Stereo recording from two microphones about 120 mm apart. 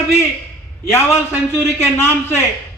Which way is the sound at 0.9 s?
20° left (ahead or behind).